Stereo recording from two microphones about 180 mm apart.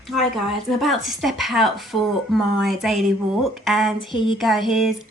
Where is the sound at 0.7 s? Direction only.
Centre (ahead or behind).